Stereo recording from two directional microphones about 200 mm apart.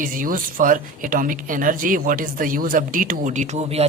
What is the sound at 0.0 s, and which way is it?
Speech, 45° right (ahead or behind).